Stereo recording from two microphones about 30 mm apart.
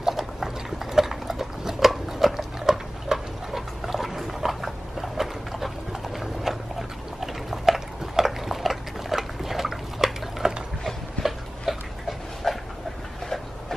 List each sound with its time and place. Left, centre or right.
0.1 s horse: centre
2.0 s pig: centre
2.7 s dog: centre
3.1 s pig: centre
7.2 s dog: centre
11.2 s dog: centre